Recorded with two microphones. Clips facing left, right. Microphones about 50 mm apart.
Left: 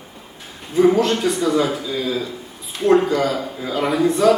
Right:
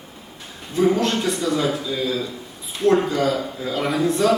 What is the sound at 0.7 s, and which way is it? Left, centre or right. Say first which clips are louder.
A man's voice: left 4 dB; centre.